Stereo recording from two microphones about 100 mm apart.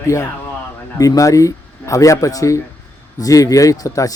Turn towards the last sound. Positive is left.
turn(degrees=35)  # may be behind; listen again after turning